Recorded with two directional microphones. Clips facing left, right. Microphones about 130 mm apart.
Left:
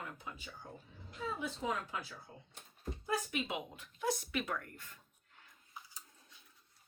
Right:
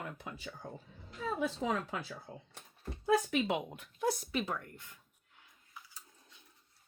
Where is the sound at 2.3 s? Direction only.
90° right.